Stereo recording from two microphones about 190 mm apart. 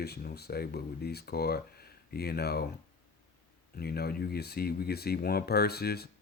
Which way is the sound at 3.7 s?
55° left (ahead or behind).